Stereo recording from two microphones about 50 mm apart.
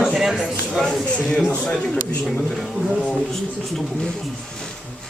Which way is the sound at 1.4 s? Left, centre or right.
Left.